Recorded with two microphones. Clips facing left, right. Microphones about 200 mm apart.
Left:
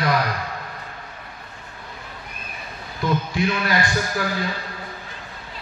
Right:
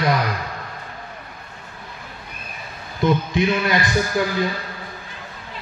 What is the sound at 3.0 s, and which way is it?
A man's voice, 20° right (ahead or behind).